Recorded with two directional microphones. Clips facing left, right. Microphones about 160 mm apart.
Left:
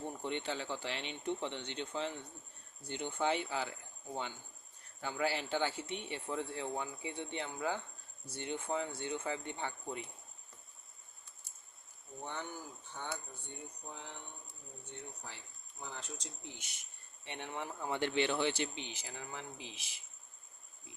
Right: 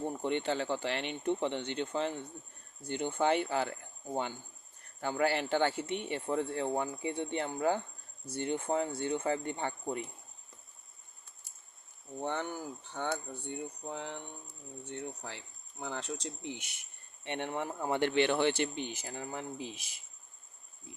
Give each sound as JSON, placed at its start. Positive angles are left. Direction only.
{"t": 0.2, "sound": "speech", "side_deg": -55}
{"t": 12.2, "sound": "speech", "side_deg": -70}